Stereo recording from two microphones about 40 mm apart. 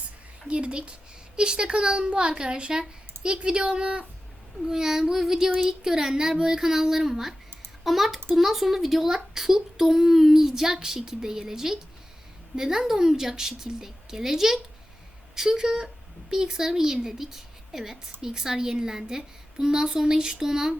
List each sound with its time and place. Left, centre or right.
0.4 s a child's voice: right
4.7 s a woman's voice: centre